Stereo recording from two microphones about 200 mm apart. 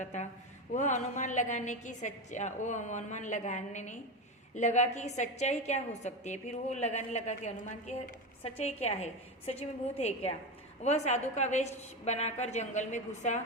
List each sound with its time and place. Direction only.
0.0 s a woman's voice: 35° left (ahead or behind)